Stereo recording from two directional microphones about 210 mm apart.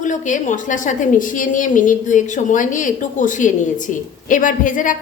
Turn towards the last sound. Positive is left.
turn(degrees=40)  # may be behind; listen again after turning